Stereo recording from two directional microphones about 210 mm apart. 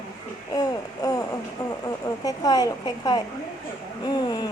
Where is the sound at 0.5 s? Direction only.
15° left (ahead or behind).